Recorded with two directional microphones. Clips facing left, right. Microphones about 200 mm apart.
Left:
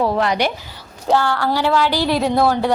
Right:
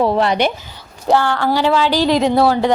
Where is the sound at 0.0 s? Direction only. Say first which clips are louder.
Right 3 dB; 25° right (ahead or behind).